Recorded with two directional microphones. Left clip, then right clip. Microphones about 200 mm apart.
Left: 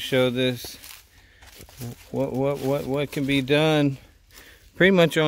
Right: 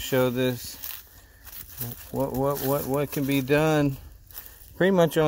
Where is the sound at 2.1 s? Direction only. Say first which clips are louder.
Left 1 dB; 25° left (ahead or behind).